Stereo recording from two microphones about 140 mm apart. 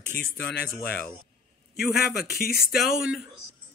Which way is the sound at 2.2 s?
90° left.